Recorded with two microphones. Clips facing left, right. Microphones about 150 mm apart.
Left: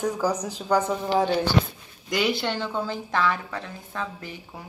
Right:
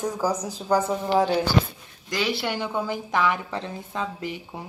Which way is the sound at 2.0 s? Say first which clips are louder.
Left 2 dB; centre (ahead or behind).